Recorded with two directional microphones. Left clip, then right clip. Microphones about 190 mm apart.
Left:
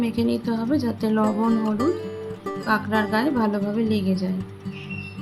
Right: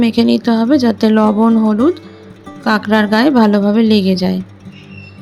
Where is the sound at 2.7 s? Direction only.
40° right (ahead or behind).